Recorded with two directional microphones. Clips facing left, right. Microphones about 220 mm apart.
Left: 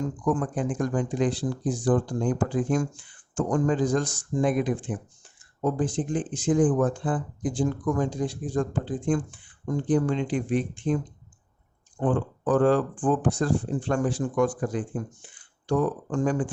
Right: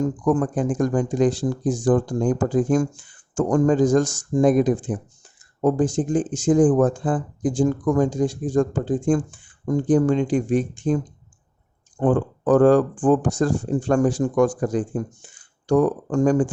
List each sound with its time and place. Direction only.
0.0 s speech: 45° right (ahead or behind)